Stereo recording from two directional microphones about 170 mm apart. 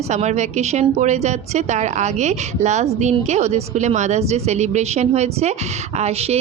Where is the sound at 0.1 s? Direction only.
40° right (ahead or behind).